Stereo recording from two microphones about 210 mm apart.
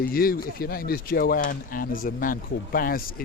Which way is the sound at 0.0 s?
45° left (ahead or behind).